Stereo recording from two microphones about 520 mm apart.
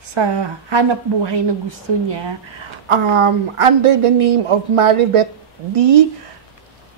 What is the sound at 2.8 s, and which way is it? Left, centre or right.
Speech, right.